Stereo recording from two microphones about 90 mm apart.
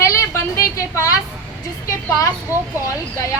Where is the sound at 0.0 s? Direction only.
35° left (ahead or behind).